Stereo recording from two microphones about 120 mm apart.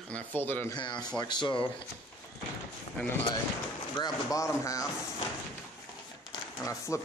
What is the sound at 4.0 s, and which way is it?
Speech, 30° left (ahead or behind).